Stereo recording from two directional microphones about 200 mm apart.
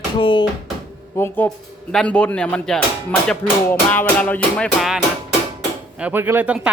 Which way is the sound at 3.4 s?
10° left (ahead or behind).